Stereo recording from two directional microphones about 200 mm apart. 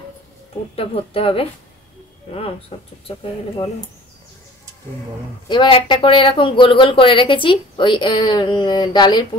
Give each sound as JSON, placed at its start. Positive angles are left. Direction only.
{"t": 0.7, "sound": "speech", "side_deg": 30}
{"t": 2.7, "sound": "speech", "side_deg": 25}
{"t": 5.5, "sound": "speech", "side_deg": 25}